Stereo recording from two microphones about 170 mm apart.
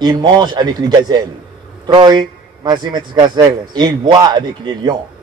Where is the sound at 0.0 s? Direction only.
25° right (ahead or behind).